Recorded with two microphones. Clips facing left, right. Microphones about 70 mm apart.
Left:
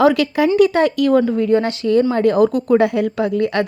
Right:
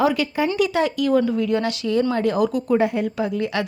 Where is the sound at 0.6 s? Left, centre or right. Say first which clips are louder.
Left 6 dB; left.